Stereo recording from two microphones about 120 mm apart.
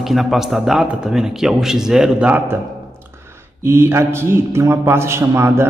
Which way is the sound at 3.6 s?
20° right (ahead or behind).